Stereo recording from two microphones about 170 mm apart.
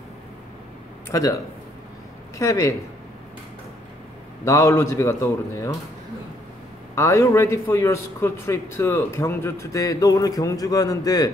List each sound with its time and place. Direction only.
1.1 s speech: 20° left (ahead or behind)
4.5 s a man's voice: 20° left (ahead or behind)
7.0 s a man's voice: 20° left (ahead or behind)